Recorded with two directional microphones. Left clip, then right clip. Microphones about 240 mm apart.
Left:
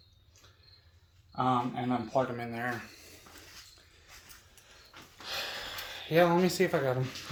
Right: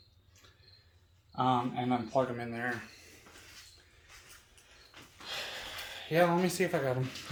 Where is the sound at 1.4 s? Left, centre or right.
Centre.